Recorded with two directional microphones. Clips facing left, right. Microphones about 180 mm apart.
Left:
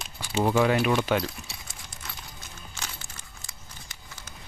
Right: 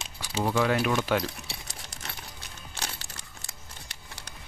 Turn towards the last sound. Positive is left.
turn(degrees=-70)  # may be behind; listen again after turning